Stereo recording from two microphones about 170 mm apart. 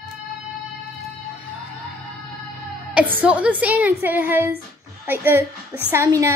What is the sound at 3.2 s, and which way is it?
A child's voice, 10° right (ahead or behind).